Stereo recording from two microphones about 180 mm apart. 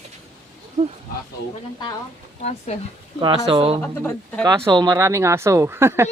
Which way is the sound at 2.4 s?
35° left (ahead or behind).